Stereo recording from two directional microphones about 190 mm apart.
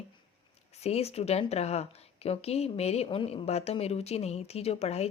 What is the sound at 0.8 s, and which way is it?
Speech, 35° left (ahead or behind).